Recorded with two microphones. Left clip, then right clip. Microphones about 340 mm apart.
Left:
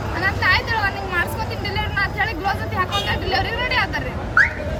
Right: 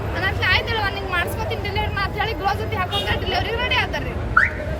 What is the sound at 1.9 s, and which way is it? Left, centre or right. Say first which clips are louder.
Speech: left 2 dB; centre.